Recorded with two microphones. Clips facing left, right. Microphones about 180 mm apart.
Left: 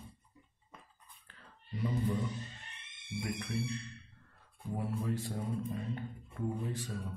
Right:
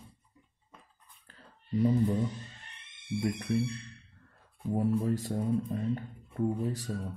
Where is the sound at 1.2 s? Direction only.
40° right (ahead or behind).